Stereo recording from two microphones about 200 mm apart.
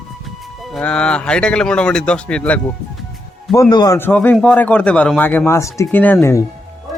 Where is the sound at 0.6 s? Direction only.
5° left (ahead or behind).